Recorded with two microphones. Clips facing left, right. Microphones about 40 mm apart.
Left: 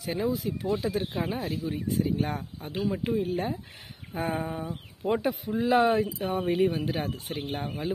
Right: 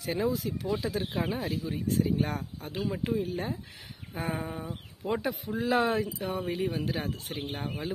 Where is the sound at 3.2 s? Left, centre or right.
Left.